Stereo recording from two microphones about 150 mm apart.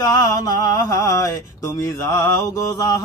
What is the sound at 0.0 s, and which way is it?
Mantra, 25° left (ahead or behind).